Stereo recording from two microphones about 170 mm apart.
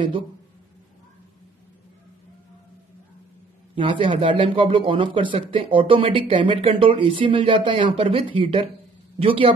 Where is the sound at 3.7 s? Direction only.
30° right (ahead or behind).